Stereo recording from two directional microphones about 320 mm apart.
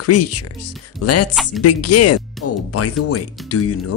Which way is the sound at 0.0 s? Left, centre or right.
Left.